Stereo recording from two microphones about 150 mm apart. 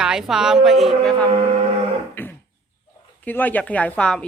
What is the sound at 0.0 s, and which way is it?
A woman's voice, 5° right (ahead or behind).